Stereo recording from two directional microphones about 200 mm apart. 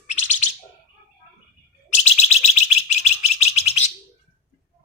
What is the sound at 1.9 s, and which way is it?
Bird, 35° left (ahead or behind).